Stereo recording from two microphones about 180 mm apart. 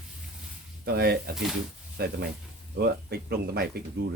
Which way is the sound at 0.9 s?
60° right (ahead or behind).